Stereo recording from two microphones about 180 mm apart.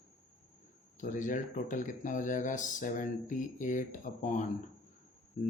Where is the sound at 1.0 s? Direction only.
45° left (ahead or behind).